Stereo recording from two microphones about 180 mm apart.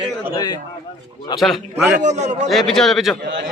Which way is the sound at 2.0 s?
40° right (ahead or behind).